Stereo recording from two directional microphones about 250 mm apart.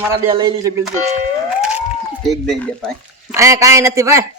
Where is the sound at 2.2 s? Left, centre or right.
Centre.